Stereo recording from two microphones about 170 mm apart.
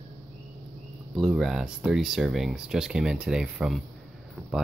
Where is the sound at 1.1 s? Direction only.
Centre (ahead or behind).